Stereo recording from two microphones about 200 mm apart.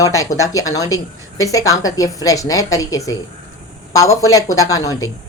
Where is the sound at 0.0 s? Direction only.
15° left (ahead or behind).